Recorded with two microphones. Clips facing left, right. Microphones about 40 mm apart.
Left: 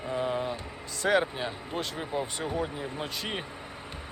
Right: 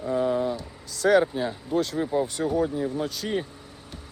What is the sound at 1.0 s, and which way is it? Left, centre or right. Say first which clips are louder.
Speech: right 6 dB; centre.